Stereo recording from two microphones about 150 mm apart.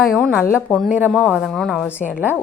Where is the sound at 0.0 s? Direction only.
Centre (ahead or behind).